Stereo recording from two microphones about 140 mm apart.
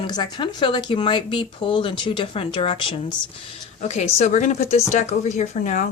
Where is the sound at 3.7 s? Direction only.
55° left (ahead or behind).